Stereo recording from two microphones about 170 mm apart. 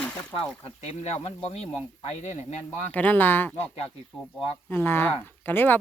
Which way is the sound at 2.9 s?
10° left (ahead or behind).